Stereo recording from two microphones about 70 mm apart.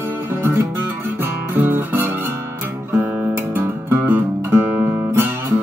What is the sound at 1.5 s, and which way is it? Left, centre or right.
Guitar, right.